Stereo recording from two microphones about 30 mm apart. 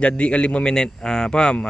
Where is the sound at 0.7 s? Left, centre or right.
Left.